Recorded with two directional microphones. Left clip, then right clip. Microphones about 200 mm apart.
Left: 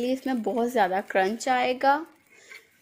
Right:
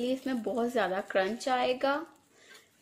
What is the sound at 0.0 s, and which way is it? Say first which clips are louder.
A woman's voice: left 5 dB; 30° left (ahead or behind).